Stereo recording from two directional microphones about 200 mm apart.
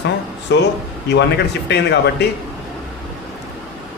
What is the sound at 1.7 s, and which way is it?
Speech, 55° left (ahead or behind).